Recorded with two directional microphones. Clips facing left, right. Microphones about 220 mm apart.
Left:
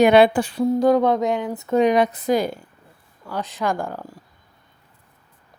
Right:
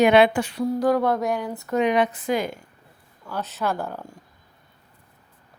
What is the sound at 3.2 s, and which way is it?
Speech, 15° left (ahead or behind).